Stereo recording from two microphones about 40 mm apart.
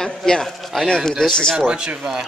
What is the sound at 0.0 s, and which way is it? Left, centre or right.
Speech, centre.